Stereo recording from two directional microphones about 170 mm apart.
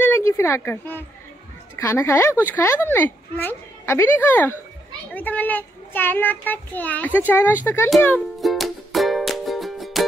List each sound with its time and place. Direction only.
0.0 s a sound: 15° left (ahead or behind)
1.8 s a child's voice: 15° left (ahead or behind)
8.4 s music: centre (ahead or behind)